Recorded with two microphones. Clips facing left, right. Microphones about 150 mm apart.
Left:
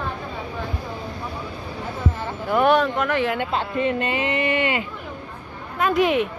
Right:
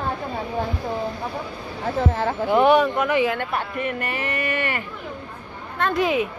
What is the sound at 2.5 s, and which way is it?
Speech, 15° right (ahead or behind).